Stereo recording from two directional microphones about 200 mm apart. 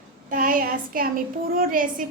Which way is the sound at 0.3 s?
45° right (ahead or behind).